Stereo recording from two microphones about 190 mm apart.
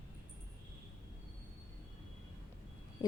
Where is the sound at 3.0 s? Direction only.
20° left (ahead or behind).